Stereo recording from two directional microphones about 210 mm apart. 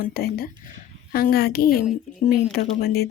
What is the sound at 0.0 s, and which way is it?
Speech, 45° left (ahead or behind).